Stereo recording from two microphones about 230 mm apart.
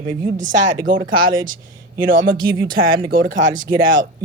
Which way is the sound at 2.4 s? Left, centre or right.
Centre.